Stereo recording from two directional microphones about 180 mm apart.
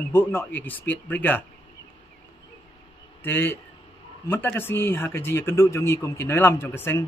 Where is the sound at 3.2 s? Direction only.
10° left (ahead or behind).